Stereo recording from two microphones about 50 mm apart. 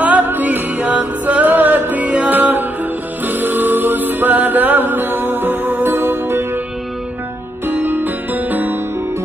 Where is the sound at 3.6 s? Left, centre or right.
Right.